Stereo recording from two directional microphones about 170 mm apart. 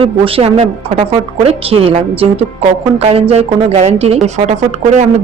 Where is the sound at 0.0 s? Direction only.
35° right (ahead or behind).